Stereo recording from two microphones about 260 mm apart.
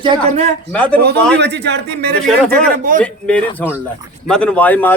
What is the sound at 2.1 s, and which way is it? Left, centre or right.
Speech, centre.